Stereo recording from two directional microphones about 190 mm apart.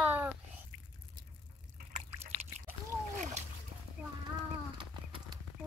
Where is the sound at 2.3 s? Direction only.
20° right (ahead or behind).